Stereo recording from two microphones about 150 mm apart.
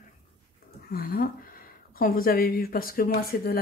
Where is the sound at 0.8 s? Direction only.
90° left.